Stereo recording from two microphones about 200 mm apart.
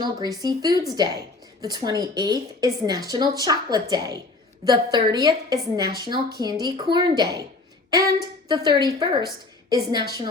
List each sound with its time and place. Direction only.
0.0 s a woman's voice: 20° right (ahead or behind)